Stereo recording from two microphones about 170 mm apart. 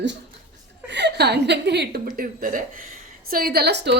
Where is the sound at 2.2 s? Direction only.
55° right (ahead or behind); by 4.0 s 85° right.